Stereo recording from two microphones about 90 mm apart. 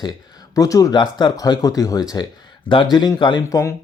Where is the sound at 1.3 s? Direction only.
45° left (ahead or behind).